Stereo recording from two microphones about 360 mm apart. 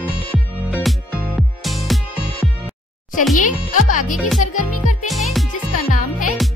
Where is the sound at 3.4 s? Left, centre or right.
Left.